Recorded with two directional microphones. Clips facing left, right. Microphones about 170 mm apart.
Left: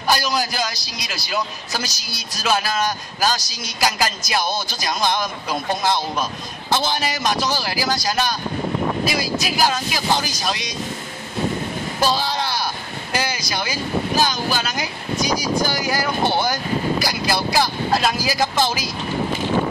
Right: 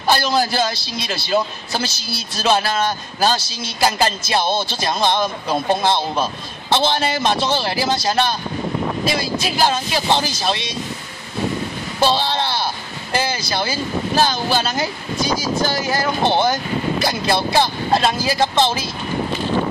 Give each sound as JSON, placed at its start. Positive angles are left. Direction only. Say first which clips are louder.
{"t": 0.0, "sound": "a man's voice", "louder": "right 3 dB", "side_deg": -30}
{"t": 12.0, "sound": "a man's voice", "louder": "right 3 dB", "side_deg": -25}